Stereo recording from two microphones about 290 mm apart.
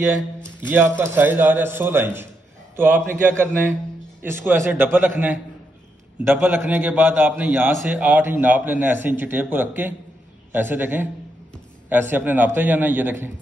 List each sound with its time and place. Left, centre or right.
0.6 s a man's voice: centre